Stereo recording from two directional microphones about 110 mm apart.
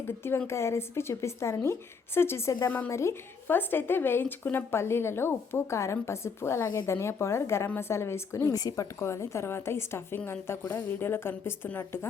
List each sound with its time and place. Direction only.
0.3 s a woman's voice: 20° left (ahead or behind)